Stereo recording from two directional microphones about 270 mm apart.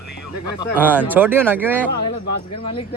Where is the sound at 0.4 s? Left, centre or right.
Centre.